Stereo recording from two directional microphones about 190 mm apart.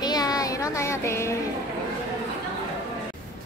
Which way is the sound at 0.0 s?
20° left (ahead or behind).